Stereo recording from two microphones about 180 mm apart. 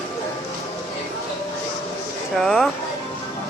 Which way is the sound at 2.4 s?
Centre (ahead or behind).